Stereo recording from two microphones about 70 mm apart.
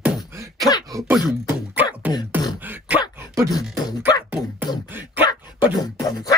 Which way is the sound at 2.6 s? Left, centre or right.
Right.